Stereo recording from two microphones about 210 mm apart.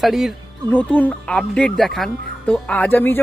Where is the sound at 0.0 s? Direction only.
Centre (ahead or behind).